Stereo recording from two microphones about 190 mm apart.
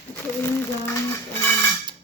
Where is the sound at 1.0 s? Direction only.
15° left (ahead or behind).